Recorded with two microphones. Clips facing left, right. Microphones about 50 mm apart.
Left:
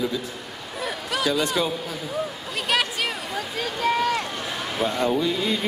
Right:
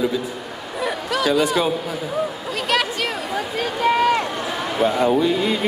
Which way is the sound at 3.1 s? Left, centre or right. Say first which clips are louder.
Right 5 dB; centre.